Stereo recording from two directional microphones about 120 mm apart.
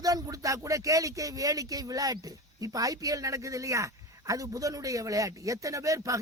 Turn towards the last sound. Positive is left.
turn(degrees=-25)  # may be behind; listen again after turning